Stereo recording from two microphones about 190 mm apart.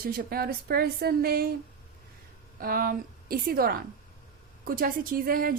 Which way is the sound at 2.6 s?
50° right (ahead or behind).